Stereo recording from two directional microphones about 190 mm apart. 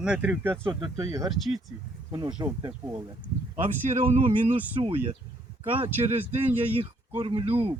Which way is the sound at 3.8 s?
35° right (ahead or behind).